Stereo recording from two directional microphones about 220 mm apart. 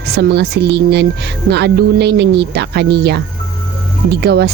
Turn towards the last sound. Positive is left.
turn(degrees=-45)  # may be behind; listen again after turning